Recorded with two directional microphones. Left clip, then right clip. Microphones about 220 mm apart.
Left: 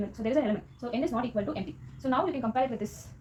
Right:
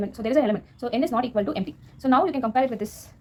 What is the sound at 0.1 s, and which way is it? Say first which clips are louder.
A woman's voice: right 6 dB; 25° right (ahead or behind).